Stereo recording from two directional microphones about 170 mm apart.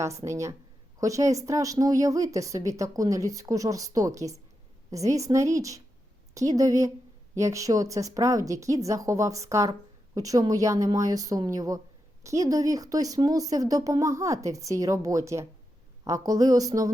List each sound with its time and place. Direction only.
0.0 s a woman's voice: 15° right (ahead or behind)